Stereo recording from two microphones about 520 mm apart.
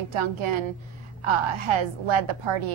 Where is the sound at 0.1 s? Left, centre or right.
Right.